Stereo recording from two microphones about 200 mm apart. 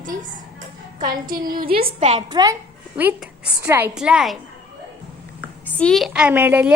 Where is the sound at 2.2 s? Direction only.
20° right (ahead or behind).